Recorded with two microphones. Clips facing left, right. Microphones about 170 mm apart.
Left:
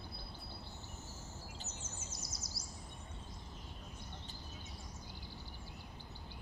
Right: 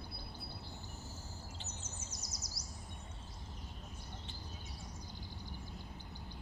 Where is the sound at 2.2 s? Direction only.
25° left (ahead or behind).